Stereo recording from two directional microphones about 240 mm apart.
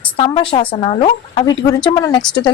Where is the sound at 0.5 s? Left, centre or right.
Left.